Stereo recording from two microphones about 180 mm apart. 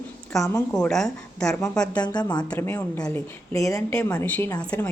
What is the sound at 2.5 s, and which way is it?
A woman's voice, 10° left (ahead or behind).